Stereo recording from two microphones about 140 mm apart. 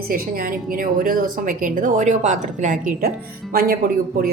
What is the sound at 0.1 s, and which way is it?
Speech, 90° right.